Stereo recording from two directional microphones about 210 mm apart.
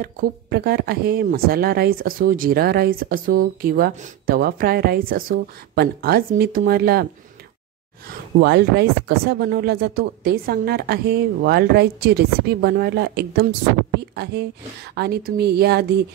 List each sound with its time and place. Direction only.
0.0 s speech: 45° right (ahead or behind)
8.4 s speech: 50° right (ahead or behind)